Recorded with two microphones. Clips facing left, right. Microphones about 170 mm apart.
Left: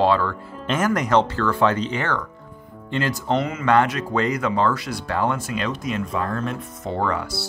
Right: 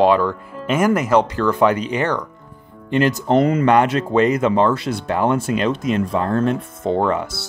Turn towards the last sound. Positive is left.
turn(degrees=-20)  # may be behind; listen again after turning